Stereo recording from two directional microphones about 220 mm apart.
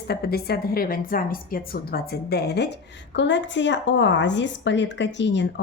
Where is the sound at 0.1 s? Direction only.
45° left (ahead or behind).